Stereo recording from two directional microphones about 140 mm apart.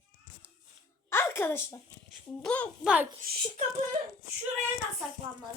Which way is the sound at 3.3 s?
90° right.